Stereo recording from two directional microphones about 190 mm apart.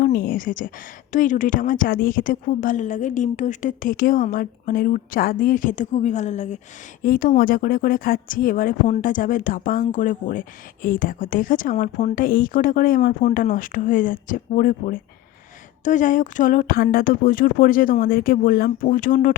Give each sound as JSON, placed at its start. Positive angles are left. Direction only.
{"t": 0.0, "sound": "a woman's voice", "side_deg": 55}